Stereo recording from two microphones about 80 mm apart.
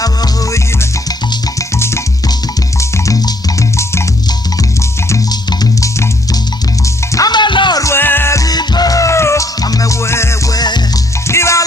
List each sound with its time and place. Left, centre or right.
0.0 s music: left
1.5 s music: left
3.1 s music: left
4.8 s music: left
6.8 s music: left
7.3 s music: left
7.9 s music: left
8.3 s music: left
9.6 s music: left
10.5 s music: left
11.3 s music: left